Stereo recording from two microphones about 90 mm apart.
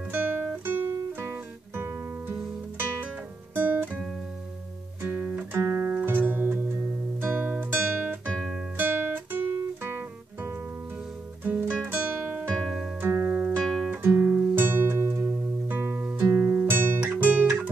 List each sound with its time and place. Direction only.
0.1 s guitar: 20° right (ahead or behind)
1.2 s music: 25° right (ahead or behind)
3.5 s guitar: 20° right (ahead or behind)
5.0 s music: 20° right (ahead or behind)
6.7 s guitar: 25° right (ahead or behind)
11.4 s music: 20° right (ahead or behind)
11.9 s guitar: 15° right (ahead or behind)
12.5 s music: centre (ahead or behind)
13.0 s music: 25° right (ahead or behind)
13.6 s guitar: 5° left (ahead or behind)
14.0 s music: 20° right (ahead or behind)
17.1 s guitar: 20° right (ahead or behind)